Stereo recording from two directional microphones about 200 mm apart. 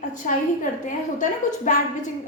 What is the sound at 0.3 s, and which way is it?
A woman's voice, 40° left (ahead or behind).